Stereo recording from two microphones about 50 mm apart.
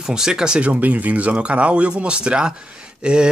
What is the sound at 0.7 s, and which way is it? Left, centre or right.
Speech, right.